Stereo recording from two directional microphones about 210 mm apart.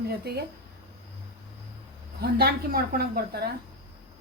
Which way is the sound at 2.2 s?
50° right (ahead or behind).